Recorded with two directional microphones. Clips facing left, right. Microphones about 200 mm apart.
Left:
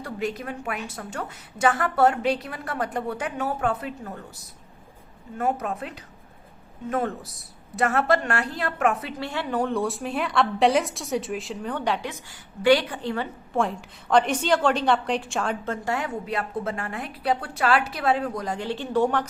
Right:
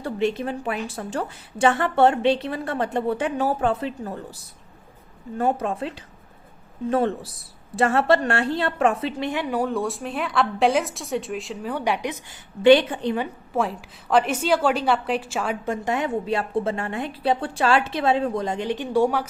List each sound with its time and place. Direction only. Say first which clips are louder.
0.0 s a woman's voice: right 6 dB; 25° right (ahead or behind); by 12.1 s 10° right (ahead or behind)
12.6 s a woman's voice: right 5 dB; 20° right (ahead or behind)
13.5 s a woman's voice: left 1 dB; 5° right (ahead or behind)